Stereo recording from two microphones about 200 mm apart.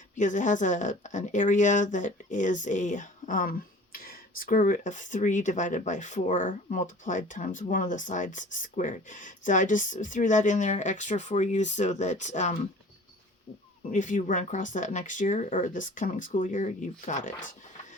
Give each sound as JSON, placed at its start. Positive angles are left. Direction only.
{"t": 0.2, "sound": "speech", "side_deg": 40}
{"t": 13.9, "sound": "speech", "side_deg": 40}